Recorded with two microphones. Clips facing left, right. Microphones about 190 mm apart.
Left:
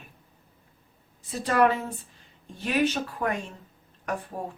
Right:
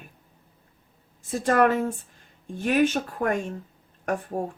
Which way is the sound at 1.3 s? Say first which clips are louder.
Right 2 dB; 50° right (ahead or behind).